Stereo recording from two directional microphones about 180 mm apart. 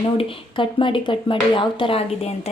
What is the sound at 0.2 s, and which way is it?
Speech, 30° left (ahead or behind).